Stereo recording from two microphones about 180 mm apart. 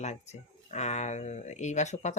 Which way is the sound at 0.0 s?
40° left (ahead or behind).